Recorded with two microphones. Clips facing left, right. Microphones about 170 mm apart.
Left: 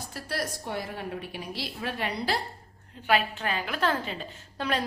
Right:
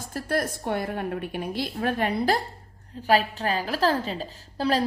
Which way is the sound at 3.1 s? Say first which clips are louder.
Right 4 dB; 35° right (ahead or behind).